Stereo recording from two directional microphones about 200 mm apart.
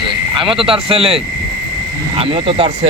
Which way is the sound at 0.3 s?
25° right (ahead or behind).